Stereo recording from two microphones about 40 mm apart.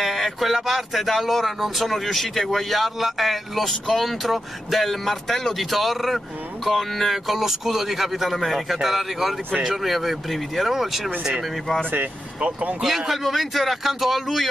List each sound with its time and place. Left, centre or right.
0.0 s speech: centre
1.9 s speech: centre
12.4 s speech: right
12.8 s speech: centre